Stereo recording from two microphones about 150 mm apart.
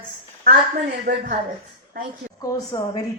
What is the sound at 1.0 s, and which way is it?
Speech, 65° right (ahead or behind).